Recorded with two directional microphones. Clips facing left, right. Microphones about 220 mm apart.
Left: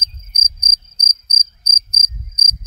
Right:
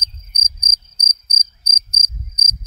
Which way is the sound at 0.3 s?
35° right (ahead or behind).